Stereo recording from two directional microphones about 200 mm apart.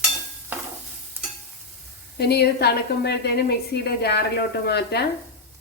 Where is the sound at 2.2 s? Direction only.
55° left (ahead or behind).